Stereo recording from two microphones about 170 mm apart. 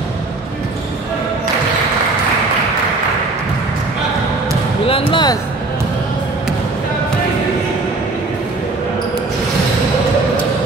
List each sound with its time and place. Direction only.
4.8 s speech: 30° left (ahead or behind)